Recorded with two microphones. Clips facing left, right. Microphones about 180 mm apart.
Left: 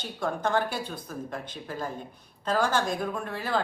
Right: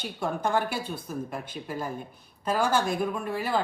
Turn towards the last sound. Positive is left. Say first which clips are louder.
# right 1 dB
turn(degrees=-10)  # may be behind; listen again after turning